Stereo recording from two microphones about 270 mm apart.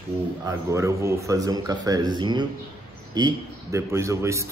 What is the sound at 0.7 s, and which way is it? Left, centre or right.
Speech, centre.